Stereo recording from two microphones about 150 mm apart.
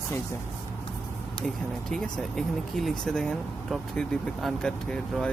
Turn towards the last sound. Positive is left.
turn(degrees=5)  # may be behind; listen again after turning